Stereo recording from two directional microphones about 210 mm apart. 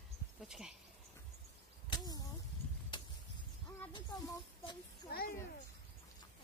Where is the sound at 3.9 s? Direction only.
20° left (ahead or behind).